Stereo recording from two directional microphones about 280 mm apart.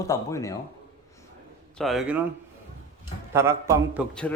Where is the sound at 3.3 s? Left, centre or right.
Centre.